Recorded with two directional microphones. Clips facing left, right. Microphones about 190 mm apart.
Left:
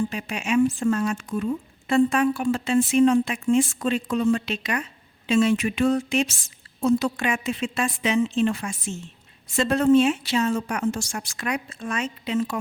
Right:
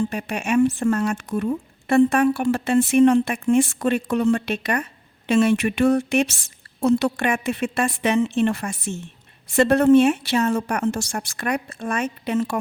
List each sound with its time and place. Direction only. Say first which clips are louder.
0.1 s a woman's voice: right 2 dB; 55° right (ahead or behind)